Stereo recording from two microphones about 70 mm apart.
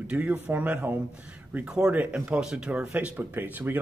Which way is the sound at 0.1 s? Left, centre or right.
Right.